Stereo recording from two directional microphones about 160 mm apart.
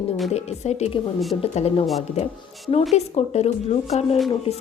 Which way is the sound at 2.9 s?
40° left (ahead or behind).